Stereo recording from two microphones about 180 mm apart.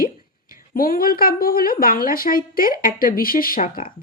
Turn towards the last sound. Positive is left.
turn(degrees=50)  # may be behind; listen again after turning